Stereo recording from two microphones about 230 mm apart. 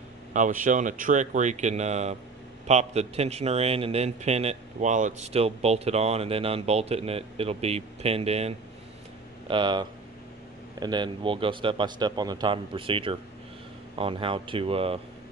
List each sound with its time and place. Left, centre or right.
0.3 s a man's voice: right